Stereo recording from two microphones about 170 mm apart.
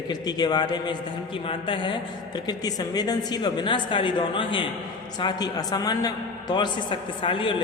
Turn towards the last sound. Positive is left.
turn(degrees=30)  # may be behind; listen again after turning